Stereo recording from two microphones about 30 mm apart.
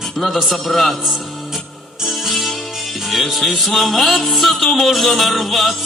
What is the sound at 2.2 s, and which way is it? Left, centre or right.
Music, centre.